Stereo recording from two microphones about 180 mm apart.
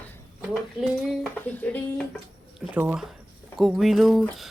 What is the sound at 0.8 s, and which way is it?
Speech, centre (ahead or behind).